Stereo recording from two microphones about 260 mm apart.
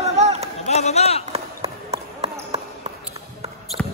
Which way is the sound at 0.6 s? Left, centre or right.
Left.